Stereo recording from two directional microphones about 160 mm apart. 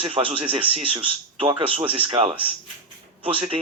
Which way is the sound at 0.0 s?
35° right (ahead or behind).